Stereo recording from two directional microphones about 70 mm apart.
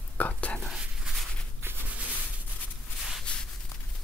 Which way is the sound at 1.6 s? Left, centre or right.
Right.